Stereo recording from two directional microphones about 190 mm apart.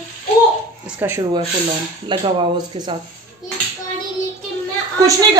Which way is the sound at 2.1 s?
25° right (ahead or behind).